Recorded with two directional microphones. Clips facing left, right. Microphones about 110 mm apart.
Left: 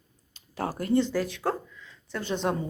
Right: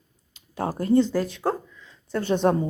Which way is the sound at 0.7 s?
30° right (ahead or behind).